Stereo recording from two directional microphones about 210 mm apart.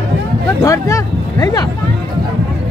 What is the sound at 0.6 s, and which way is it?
Speech, 15° left (ahead or behind).